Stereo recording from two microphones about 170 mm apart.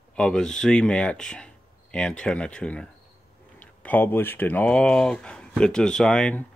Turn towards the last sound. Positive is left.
turn(degrees=5)  # may be behind; listen again after turning